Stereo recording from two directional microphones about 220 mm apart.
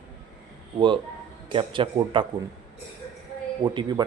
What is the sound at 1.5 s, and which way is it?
Speech, 20° right (ahead or behind).